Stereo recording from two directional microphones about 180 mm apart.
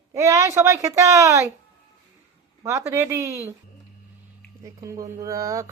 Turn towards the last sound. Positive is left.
turn(degrees=-15)  # may be behind; listen again after turning